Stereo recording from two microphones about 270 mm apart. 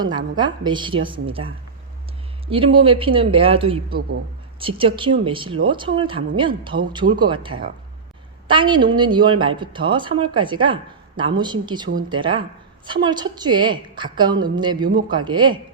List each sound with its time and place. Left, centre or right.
0.0 s a woman's voice: centre
2.7 s a woman's voice: centre